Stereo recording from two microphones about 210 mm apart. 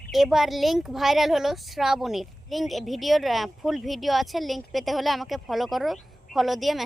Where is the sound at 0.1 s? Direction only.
Centre (ahead or behind).